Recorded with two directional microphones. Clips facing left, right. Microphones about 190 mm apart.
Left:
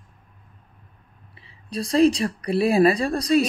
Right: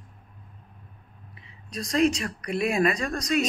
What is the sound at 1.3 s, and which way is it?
Speech, 30° left (ahead or behind).